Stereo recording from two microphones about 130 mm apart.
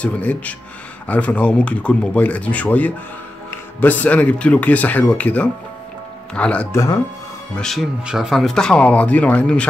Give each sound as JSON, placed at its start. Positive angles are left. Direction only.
{"t": 0.0, "sound": "speech", "side_deg": 10}
{"t": 6.7, "sound": "speech", "side_deg": 25}
{"t": 7.5, "sound": "speech", "side_deg": 0}